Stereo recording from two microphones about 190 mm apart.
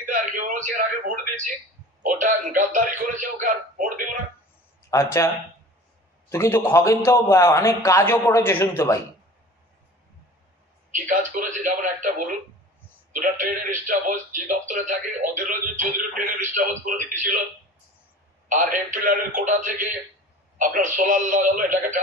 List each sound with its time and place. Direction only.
0.0 s a sound: 45° right (ahead or behind)
2.0 s speech: 45° right (ahead or behind)
4.9 s a man's voice: 15° left (ahead or behind)
6.3 s a man's voice: 15° left (ahead or behind)
10.9 s speech: 45° right (ahead or behind)
18.5 s speech: 45° right (ahead or behind)